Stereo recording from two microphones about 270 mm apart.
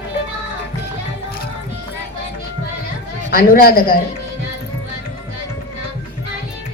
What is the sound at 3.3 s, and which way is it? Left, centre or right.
Speech, left.